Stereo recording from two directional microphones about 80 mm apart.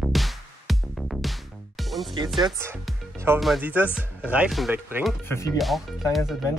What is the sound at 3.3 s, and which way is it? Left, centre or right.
Speech, right.